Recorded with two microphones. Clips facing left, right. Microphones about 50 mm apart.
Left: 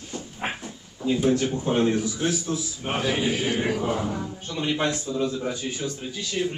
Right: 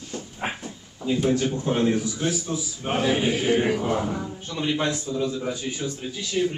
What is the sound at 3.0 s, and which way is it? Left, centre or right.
A man's voice, right.